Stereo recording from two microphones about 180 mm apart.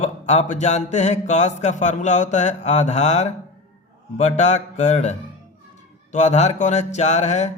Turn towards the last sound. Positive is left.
turn(degrees=40)  # may be behind; listen again after turning